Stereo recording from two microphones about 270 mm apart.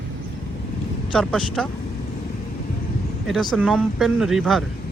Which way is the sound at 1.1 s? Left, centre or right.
Centre.